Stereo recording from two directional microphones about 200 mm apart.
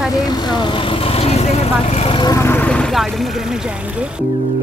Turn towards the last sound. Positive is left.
turn(degrees=0)  # may be behind; listen again after turning